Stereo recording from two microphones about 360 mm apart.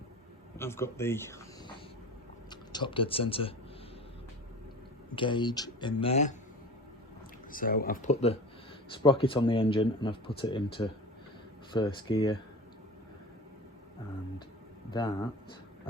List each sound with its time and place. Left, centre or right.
0.6 s speech: centre
5.1 s speech: centre
7.5 s speech: left
14.8 s speech: centre